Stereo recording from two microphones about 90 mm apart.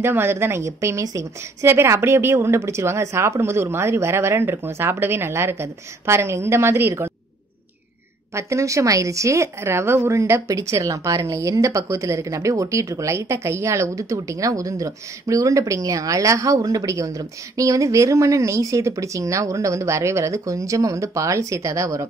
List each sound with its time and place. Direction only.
0.0 s a woman's voice: 25° right (ahead or behind)
8.4 s a woman's voice: 35° right (ahead or behind)